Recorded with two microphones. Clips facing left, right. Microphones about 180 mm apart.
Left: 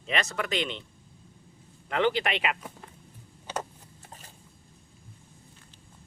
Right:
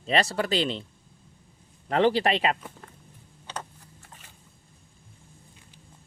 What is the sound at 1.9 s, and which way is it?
Speech, 35° right (ahead or behind).